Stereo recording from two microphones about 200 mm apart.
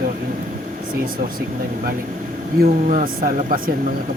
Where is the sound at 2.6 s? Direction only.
40° right (ahead or behind).